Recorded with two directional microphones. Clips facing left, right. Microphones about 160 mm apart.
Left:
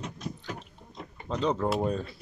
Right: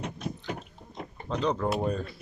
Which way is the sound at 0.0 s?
60° right (ahead or behind).